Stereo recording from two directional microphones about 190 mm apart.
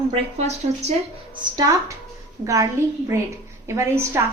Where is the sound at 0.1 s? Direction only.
35° right (ahead or behind).